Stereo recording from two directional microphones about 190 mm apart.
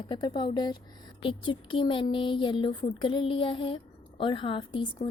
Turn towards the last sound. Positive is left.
turn(degrees=25)  # may be behind; listen again after turning